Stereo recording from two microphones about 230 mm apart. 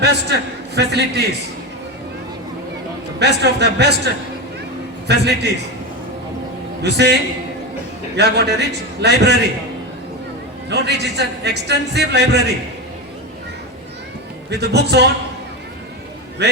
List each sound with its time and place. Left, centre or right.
0.0 s a man's voice: right
3.2 s a man's voice: right
6.8 s a man's voice: right
10.7 s a man's voice: right
14.6 s a man's voice: right
16.4 s speech: right